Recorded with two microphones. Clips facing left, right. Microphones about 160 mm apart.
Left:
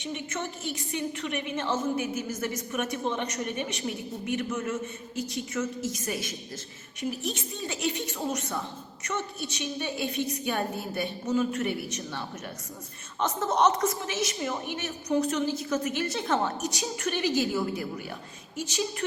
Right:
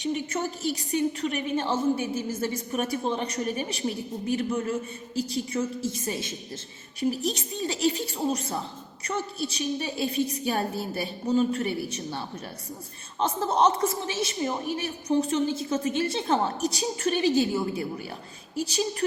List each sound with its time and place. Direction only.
0.0 s a woman's voice: 40° right (ahead or behind)
7.1 s a woman's voice: 35° right (ahead or behind)